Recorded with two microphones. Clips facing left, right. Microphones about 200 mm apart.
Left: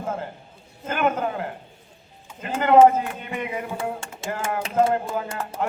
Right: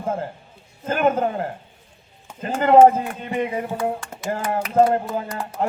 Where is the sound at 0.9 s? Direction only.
35° right (ahead or behind).